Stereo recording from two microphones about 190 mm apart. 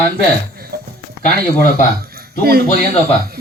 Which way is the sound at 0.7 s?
55° right (ahead or behind).